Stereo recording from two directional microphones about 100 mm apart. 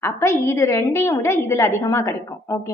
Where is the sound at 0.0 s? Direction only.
25° left (ahead or behind).